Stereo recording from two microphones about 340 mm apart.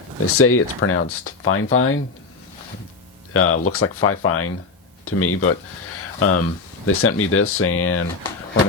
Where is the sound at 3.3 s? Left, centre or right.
Left.